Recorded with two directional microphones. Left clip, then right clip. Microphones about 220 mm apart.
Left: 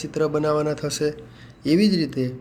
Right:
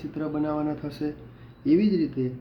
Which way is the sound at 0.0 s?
40° left (ahead or behind).